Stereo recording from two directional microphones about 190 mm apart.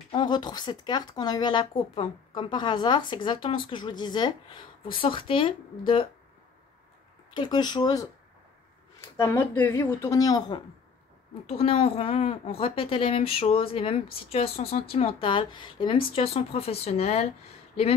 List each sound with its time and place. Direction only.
0.1 s speech: 25° left (ahead or behind)
7.3 s speech: 25° left (ahead or behind)
9.1 s speech: 20° left (ahead or behind)
11.4 s speech: 30° left (ahead or behind)